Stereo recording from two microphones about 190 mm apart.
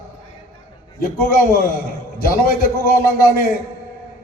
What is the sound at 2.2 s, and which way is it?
Speech, 50° left (ahead or behind).